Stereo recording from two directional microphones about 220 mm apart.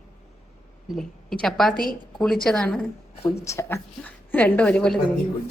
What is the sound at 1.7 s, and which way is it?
Speech, 40° left (ahead or behind).